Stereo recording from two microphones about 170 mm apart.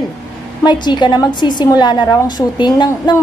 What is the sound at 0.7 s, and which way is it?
A woman's voice, 25° left (ahead or behind).